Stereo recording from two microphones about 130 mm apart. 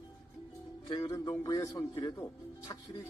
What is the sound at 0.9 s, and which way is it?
Music, 30° left (ahead or behind).